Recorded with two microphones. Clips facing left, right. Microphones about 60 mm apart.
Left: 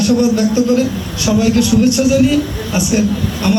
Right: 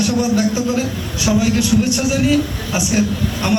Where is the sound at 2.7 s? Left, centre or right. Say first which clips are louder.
Left 3 dB; centre.